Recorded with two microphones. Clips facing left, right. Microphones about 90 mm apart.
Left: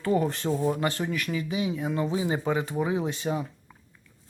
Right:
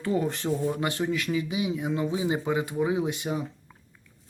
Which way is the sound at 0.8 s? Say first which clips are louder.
Right 1 dB; 20° right (ahead or behind).